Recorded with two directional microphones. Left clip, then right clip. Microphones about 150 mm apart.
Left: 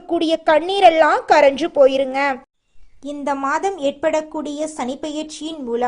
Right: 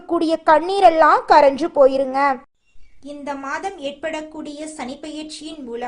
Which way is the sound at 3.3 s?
30° left (ahead or behind).